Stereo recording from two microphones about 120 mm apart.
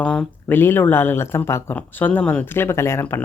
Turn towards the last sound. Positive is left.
turn(degrees=20)  # may be behind; listen again after turning